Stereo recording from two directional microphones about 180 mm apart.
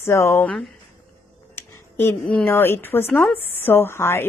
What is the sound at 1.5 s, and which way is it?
A woman's voice, 10° left (ahead or behind).